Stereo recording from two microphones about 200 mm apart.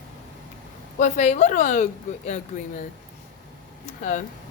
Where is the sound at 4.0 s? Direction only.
40° left (ahead or behind).